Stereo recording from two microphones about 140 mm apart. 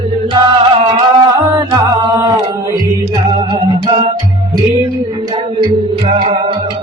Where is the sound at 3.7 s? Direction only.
45° right (ahead or behind).